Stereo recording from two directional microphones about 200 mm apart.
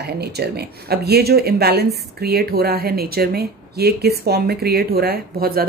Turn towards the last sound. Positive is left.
turn(degrees=-50)  # may be behind; listen again after turning